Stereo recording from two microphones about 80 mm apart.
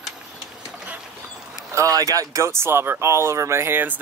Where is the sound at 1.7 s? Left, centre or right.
Right.